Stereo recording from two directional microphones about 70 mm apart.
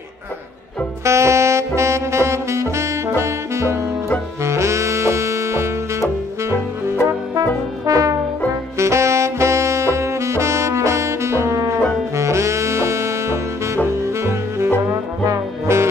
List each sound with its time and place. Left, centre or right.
1.0 s saxophone: right
7.8 s brass instrument: right
8.7 s saxophone: right
15.2 s trombone: right